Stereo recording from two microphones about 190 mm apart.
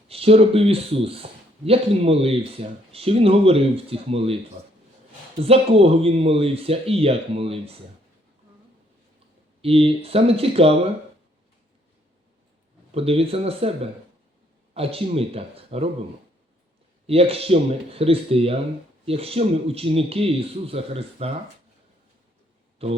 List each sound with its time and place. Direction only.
0.1 s speech: 30° right (ahead or behind)
5.4 s speech: 30° right (ahead or behind)
9.6 s speech: 30° right (ahead or behind)
12.9 s speech: 30° right (ahead or behind)
17.1 s speech: 30° right (ahead or behind)
22.8 s speech: 30° right (ahead or behind)